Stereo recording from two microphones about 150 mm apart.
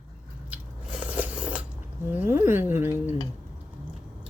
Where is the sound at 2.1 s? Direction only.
15° right (ahead or behind).